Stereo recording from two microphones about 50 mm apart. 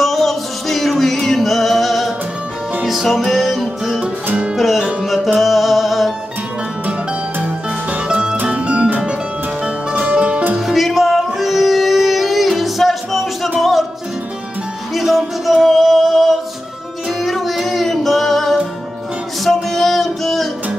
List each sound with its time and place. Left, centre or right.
0.0 s music: centre
7.3 s music: right
8.1 s music: centre
10.6 s music: centre
15.0 s music: centre